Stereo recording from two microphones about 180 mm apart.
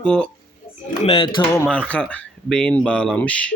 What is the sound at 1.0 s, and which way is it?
Speech, 30° left (ahead or behind).